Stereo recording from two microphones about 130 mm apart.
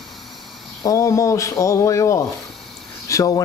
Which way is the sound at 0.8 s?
25° left (ahead or behind).